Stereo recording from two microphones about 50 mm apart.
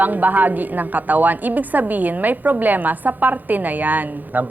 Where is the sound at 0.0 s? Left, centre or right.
Right.